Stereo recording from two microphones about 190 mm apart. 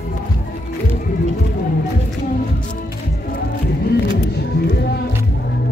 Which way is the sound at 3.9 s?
60° left (ahead or behind).